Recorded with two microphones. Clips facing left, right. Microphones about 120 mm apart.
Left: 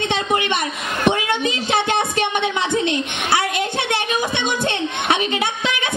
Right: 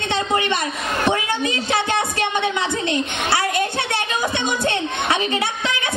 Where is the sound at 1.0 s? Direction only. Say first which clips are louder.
Left 3 dB; 20° left (ahead or behind).